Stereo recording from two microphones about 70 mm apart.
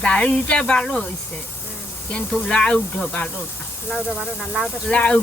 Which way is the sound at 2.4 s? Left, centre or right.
Centre.